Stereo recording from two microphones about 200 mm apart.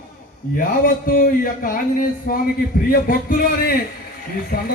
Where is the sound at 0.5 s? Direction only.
45° left (ahead or behind).